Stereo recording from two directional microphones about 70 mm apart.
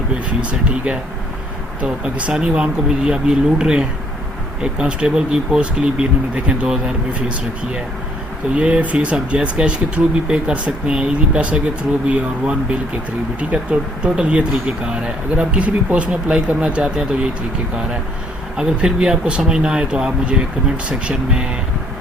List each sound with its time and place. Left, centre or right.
1.8 s speech: centre
18.5 s speech: centre